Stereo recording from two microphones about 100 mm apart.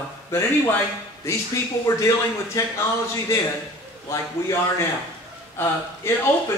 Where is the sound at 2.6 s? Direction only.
35° left (ahead or behind).